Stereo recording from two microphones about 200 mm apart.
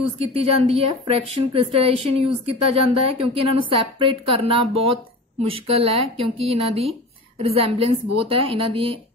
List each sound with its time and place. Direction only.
0.2 s a woman's voice: 30° right (ahead or behind)